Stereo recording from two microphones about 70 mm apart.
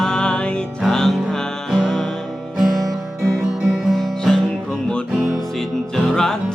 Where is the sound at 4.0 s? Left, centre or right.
Centre.